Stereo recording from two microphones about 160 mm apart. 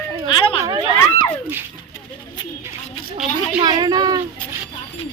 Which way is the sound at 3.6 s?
25° right (ahead or behind).